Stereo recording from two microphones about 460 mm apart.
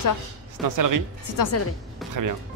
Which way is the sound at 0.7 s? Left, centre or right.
Right.